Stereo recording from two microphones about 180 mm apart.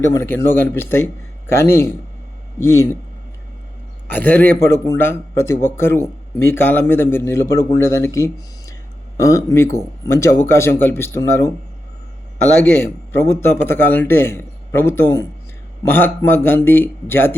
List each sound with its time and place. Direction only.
0.1 s speech: 15° left (ahead or behind)
4.1 s speech: 10° left (ahead or behind)
13.4 s speech: 10° left (ahead or behind)